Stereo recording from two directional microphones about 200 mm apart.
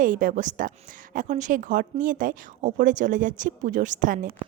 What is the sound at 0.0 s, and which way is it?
A woman's voice, 40° right (ahead or behind).